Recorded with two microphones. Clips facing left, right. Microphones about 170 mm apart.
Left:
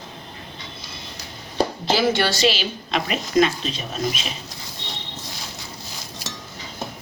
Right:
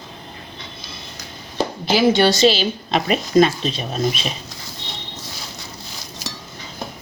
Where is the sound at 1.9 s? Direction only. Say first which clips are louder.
Right 7 dB; 15° right (ahead or behind).